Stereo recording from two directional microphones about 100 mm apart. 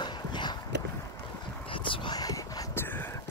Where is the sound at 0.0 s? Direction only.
45° left (ahead or behind).